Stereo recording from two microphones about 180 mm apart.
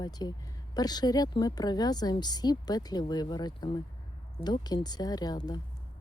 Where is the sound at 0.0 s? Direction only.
20° left (ahead or behind).